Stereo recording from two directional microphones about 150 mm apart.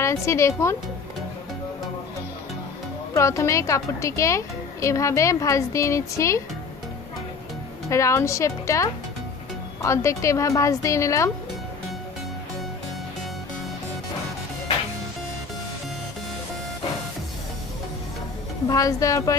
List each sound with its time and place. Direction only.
0.0 s a woman's voice: 20° left (ahead or behind)
3.2 s a woman's voice: 20° left (ahead or behind)
7.9 s a woman's voice: 20° left (ahead or behind)
18.7 s a woman's voice: 20° left (ahead or behind)